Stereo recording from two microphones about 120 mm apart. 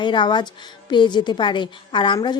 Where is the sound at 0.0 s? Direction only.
40° left (ahead or behind).